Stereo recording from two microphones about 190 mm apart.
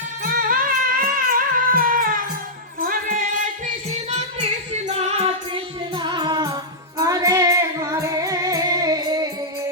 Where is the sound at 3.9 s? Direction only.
35° right (ahead or behind).